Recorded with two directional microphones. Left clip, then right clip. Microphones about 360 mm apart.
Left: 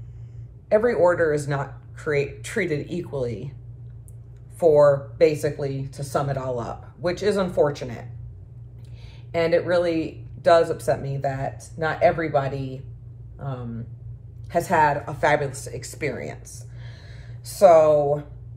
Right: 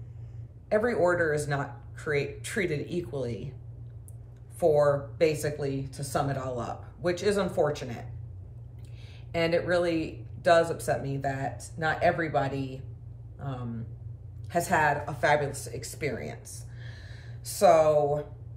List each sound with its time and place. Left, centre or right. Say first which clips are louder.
0.7 s speech: left 7 dB; centre
4.6 s speech: left 7 dB; centre
9.3 s speech: left 6 dB; centre
14.5 s speech: left 6 dB; centre